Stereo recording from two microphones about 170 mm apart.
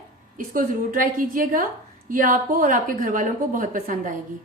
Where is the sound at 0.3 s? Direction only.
55° right (ahead or behind).